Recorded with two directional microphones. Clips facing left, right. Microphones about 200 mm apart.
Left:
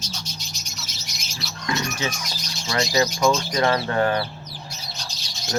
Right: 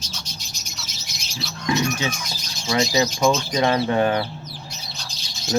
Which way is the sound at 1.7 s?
15° right (ahead or behind).